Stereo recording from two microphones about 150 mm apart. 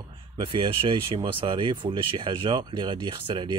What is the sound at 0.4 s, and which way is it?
Speech, 35° right (ahead or behind).